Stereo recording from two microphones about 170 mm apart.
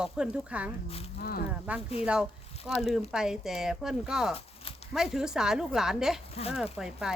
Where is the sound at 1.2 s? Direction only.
65° left (ahead or behind).